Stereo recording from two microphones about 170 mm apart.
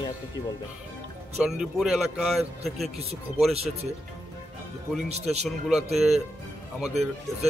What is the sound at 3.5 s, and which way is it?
Speech, 35° right (ahead or behind).